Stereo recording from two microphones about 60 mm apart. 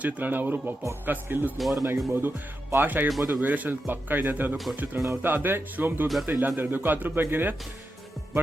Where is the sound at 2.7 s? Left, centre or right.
Right.